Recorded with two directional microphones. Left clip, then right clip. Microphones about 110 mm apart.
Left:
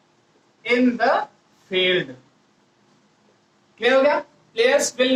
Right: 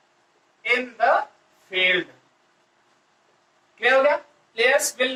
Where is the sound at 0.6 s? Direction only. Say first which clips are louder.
Left 2 dB; 30° left (ahead or behind).